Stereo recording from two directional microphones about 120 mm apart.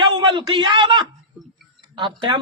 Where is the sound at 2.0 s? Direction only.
45° right (ahead or behind).